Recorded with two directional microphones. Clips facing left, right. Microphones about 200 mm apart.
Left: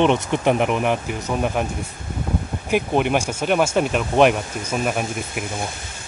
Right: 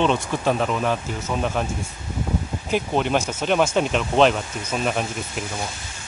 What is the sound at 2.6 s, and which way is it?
Speech, 15° left (ahead or behind).